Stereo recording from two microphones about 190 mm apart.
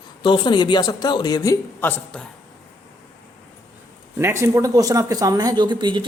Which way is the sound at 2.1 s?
5° left (ahead or behind).